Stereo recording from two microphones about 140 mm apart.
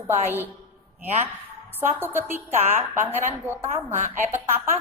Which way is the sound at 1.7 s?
15° right (ahead or behind).